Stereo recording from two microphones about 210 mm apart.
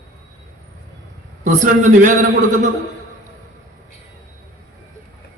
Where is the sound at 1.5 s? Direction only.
40° right (ahead or behind).